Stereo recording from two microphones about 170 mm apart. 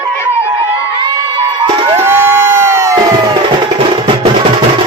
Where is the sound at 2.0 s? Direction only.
15° right (ahead or behind).